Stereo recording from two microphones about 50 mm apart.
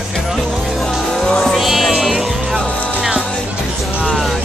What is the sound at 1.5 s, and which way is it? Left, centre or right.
Music, centre.